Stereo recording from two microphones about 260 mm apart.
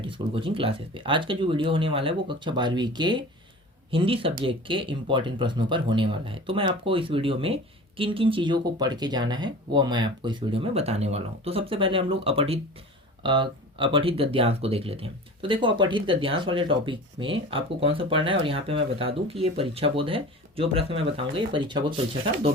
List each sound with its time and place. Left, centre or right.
0.0 s speech: centre